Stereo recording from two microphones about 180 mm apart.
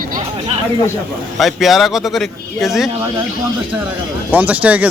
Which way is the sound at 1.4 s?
Centre (ahead or behind).